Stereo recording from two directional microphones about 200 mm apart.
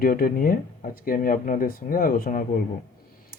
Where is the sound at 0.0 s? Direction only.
45° left (ahead or behind).